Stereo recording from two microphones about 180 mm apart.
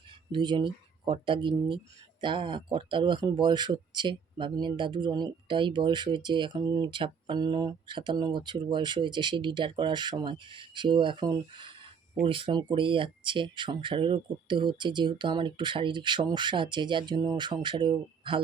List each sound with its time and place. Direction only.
0.3 s speech: 25° right (ahead or behind)